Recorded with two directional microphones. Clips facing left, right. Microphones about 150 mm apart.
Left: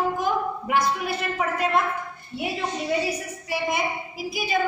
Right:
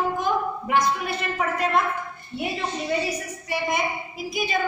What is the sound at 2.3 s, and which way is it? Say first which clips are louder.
A woman's voice: even; 5° left (ahead or behind).